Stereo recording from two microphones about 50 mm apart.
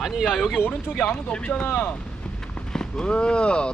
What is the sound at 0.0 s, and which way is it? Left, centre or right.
Speech, centre.